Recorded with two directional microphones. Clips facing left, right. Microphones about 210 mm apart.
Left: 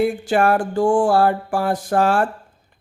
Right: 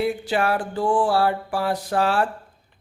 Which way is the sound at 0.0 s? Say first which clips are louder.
Left 5 dB; 50° left (ahead or behind).